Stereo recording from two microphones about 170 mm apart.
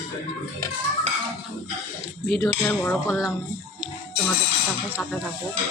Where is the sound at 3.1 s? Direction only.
5° right (ahead or behind).